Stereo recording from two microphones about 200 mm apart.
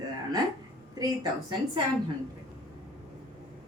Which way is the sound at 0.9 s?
20° right (ahead or behind).